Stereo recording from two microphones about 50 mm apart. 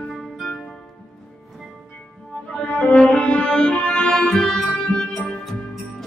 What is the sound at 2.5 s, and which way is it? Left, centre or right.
Cello, left.